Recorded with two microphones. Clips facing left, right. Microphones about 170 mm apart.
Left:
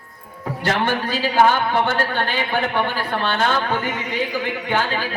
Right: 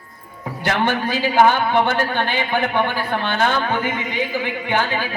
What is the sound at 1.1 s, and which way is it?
A man's voice, 15° right (ahead or behind).